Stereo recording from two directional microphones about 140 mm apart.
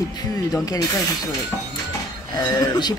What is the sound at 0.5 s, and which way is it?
Speech, 25° left (ahead or behind).